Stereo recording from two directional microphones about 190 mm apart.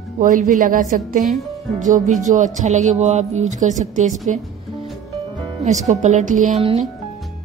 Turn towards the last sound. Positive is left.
turn(degrees=-35)  # may be behind; listen again after turning